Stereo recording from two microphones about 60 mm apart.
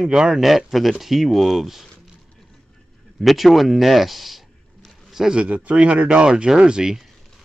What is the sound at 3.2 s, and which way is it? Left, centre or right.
Speech, centre.